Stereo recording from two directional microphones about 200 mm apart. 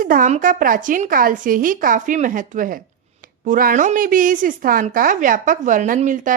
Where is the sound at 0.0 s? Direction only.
45° right (ahead or behind).